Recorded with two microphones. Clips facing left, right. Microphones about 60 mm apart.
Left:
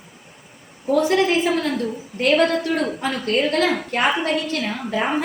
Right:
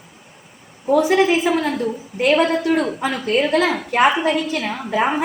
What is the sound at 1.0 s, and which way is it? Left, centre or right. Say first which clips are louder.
A woman's voice: right 2 dB; right.